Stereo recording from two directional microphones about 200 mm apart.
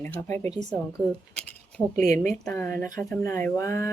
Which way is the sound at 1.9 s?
40° right (ahead or behind).